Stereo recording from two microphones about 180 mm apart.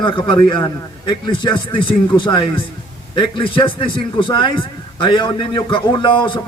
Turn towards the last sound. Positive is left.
turn(degrees=25)  # may be behind; listen again after turning